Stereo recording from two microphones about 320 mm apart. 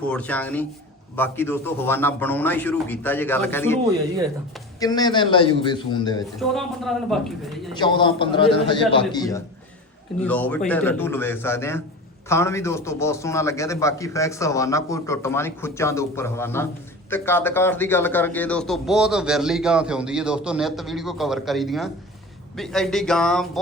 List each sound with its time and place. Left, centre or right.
0.0 s a man's voice: centre
4.8 s a man's voice: centre
6.5 s a man's voice: centre
7.8 s a man's voice: centre